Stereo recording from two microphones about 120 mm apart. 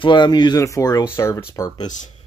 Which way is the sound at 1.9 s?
90° left.